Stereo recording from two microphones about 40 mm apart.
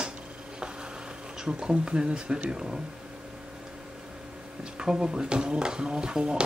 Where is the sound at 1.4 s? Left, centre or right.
Right.